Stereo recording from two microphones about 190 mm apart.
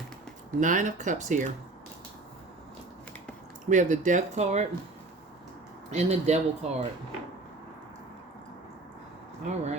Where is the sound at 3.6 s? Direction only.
40° right (ahead or behind).